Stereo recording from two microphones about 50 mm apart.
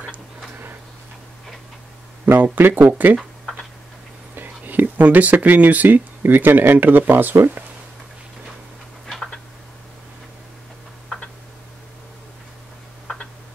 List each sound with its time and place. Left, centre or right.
2.3 s speech: right
4.4 s speech: right
7.3 s speech: right
9.0 s a sound: centre
13.0 s tick-tock: centre